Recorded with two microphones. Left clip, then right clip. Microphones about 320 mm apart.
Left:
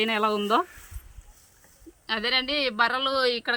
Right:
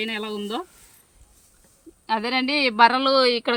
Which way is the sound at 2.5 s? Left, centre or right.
Centre.